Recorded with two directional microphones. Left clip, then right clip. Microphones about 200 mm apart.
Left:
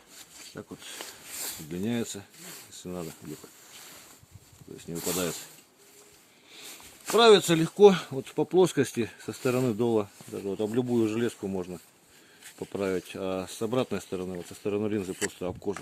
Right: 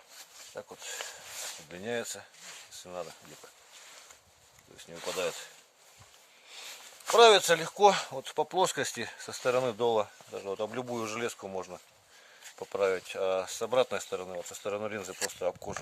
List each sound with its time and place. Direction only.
0.5 s speech: 40° right (ahead or behind)
7.2 s speech: 45° right (ahead or behind)